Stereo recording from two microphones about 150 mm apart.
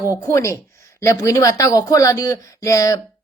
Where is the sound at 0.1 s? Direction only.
20° left (ahead or behind).